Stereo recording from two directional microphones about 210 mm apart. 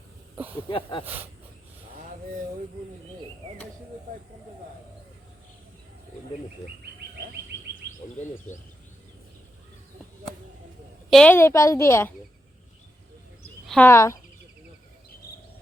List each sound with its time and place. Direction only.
0.7 s speech: 25° left (ahead or behind)
1.0 s speech: 10° right (ahead or behind)
11.1 s a woman's voice: 5° left (ahead or behind)
13.7 s speech: 10° left (ahead or behind)